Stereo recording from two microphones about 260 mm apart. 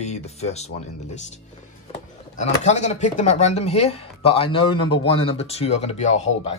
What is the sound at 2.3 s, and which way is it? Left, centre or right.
Speech, left.